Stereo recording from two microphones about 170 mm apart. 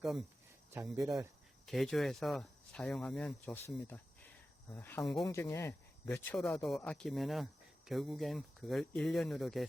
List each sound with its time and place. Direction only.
0.7 s speech: 15° right (ahead or behind)
1.6 s speech: centre (ahead or behind)